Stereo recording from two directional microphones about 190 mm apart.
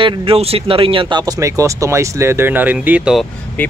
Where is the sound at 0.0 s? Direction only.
30° right (ahead or behind); by 3.3 s 5° right (ahead or behind).